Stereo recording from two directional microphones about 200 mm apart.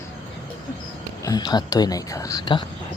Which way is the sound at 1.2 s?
20° left (ahead or behind).